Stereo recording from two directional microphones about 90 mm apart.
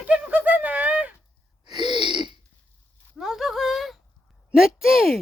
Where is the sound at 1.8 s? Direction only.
60° right (ahead or behind).